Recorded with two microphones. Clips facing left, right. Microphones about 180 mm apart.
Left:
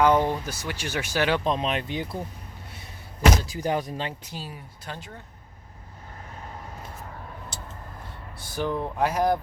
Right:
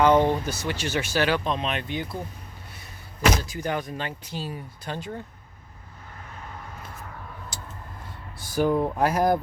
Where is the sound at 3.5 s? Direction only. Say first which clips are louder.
Left 2 dB; 35° left (ahead or behind).